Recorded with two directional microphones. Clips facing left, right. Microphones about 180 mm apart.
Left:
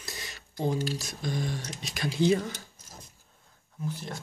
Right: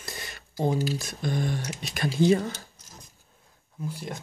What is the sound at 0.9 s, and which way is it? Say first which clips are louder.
Speech: right 3 dB; 55° right (ahead or behind).